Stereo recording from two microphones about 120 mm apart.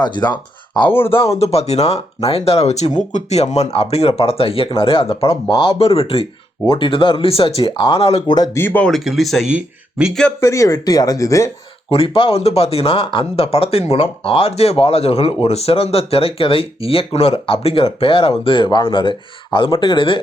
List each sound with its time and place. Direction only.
0.0 s speech: 35° left (ahead or behind)
0.9 s speech: 20° left (ahead or behind)
1.4 s speech: 60° left (ahead or behind)
3.1 s speech: 80° left; by 8.4 s 50° left (ahead or behind)
8.5 s speech: 15° left (ahead or behind)
8.9 s speech: centre (ahead or behind)
10.4 s speech: 25° left (ahead or behind)
11.9 s speech: 50° left (ahead or behind)